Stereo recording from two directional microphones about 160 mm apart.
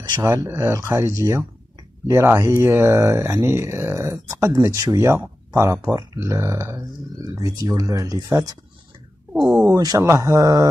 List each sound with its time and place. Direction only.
0.0 s speech: 20° right (ahead or behind)
9.3 s speech: 5° right (ahead or behind)
9.8 s speech: 20° right (ahead or behind)